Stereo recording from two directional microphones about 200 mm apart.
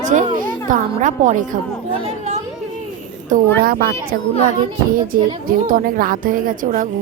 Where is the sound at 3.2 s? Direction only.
45° right (ahead or behind).